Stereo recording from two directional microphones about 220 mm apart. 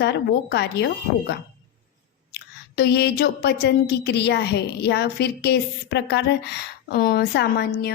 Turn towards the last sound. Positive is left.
turn(degrees=45)  # may be behind; listen again after turning